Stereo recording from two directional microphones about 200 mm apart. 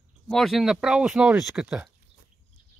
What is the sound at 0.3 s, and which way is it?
Speech, centre (ahead or behind).